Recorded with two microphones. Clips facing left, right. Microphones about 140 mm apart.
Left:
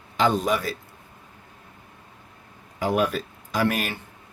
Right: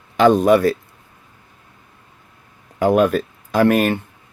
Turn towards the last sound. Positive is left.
turn(degrees=-55)  # may be behind; listen again after turning